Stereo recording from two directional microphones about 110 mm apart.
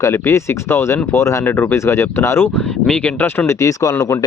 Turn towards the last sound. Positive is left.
turn(degrees=30)  # may be behind; listen again after turning